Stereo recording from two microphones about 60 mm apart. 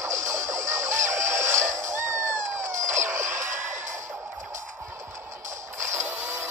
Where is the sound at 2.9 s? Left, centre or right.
Right.